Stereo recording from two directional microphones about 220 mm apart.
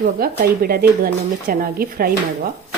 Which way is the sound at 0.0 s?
45° right (ahead or behind).